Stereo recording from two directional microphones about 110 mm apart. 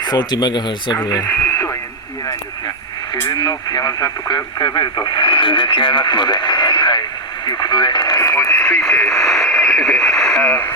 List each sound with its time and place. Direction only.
0.0 s speech: 40° left (ahead or behind)
1.4 s radio: 25° left (ahead or behind)
3.2 s speech: 40° left (ahead or behind); by 8.8 s 20° left (ahead or behind)
8.8 s speech: 5° left (ahead or behind)